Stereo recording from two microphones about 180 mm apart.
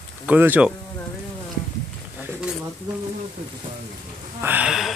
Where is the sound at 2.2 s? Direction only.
5° right (ahead or behind).